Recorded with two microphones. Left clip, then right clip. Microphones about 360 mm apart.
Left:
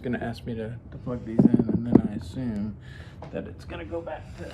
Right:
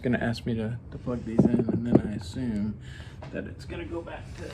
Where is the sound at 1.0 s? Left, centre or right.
Centre.